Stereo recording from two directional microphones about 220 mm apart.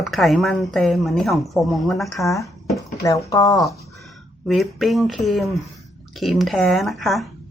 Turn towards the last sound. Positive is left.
turn(degrees=0)  # may be behind; listen again after turning